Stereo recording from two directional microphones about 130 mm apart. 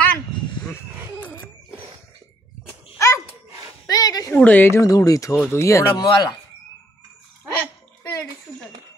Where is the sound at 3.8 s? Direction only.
30° left (ahead or behind).